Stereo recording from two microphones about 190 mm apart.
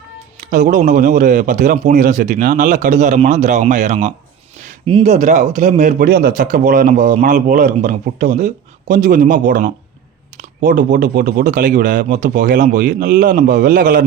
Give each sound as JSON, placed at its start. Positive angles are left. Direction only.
{"t": 0.3, "sound": "a man's voice", "side_deg": -40}